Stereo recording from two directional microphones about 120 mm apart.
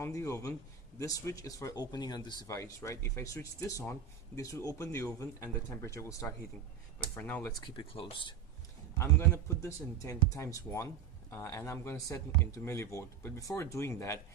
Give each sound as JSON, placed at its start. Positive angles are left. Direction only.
{"t": 0.0, "sound": "speech", "side_deg": 25}
{"t": 2.6, "sound": "speech", "side_deg": 25}
{"t": 7.5, "sound": "a man's voice", "side_deg": 40}
{"t": 9.0, "sound": "speech", "side_deg": 25}